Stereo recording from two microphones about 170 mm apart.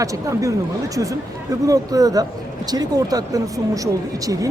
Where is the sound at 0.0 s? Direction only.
20° right (ahead or behind).